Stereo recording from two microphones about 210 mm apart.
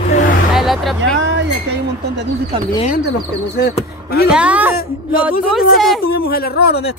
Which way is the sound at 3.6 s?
50° left (ahead or behind).